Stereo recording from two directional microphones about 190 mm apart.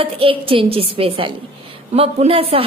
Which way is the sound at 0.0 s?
30° right (ahead or behind).